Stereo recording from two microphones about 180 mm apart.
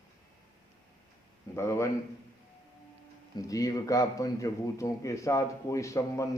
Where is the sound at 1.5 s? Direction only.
15° left (ahead or behind).